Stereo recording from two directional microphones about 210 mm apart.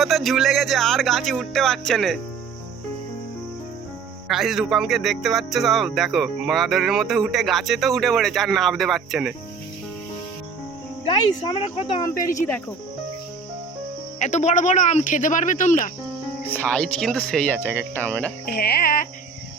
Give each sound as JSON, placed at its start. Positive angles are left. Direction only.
{"t": 0.0, "sound": "speech", "side_deg": 0}
{"t": 4.3, "sound": "speech", "side_deg": 0}
{"t": 11.0, "sound": "speech", "side_deg": 25}
{"t": 14.2, "sound": "speech", "side_deg": 35}
{"t": 16.5, "sound": "speech", "side_deg": 5}
{"t": 18.4, "sound": "speech", "side_deg": 50}